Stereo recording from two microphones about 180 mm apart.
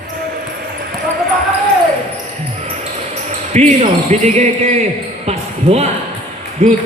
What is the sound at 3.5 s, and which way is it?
Speech, 40° right (ahead or behind).